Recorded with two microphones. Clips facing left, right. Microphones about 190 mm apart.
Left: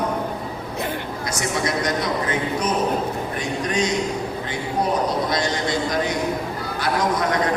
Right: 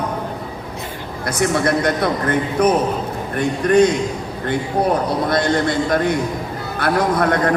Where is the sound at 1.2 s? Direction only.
55° right (ahead or behind).